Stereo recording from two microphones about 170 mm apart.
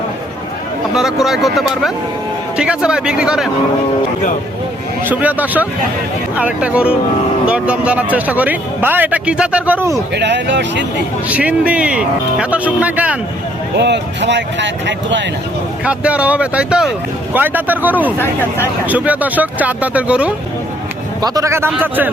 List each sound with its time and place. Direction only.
0.9 s speech: centre (ahead or behind)
5.0 s a man's voice: 10° right (ahead or behind)
10.2 s speech: 90° right
11.3 s a man's voice: 10° right (ahead or behind)
13.7 s speech: 85° right
15.8 s a man's voice: 10° right (ahead or behind)
18.2 s speech: 15° left (ahead or behind)
18.9 s a man's voice: 10° right (ahead or behind)
21.2 s a man's voice: 20° right (ahead or behind)